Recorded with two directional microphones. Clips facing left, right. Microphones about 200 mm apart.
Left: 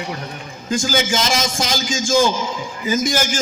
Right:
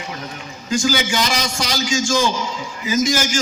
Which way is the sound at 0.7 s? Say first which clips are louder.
Even; 50° left (ahead or behind).